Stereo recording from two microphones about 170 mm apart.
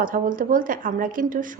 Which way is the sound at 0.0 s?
55° right (ahead or behind).